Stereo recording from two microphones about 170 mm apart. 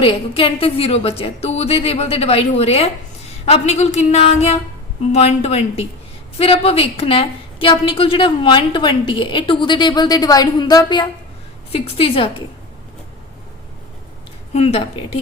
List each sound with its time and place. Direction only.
0.0 s a woman's voice: 30° left (ahead or behind)
14.5 s a woman's voice: 40° left (ahead or behind)